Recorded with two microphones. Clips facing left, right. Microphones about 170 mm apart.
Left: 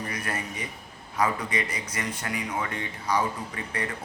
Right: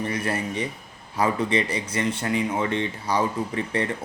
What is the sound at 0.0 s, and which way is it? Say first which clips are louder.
Speech: right 6 dB; 30° right (ahead or behind).